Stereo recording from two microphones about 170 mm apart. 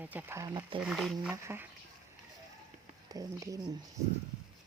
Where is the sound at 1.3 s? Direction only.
10° right (ahead or behind).